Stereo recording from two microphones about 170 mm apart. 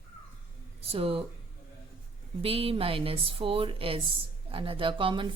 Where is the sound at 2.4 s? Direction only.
35° right (ahead or behind).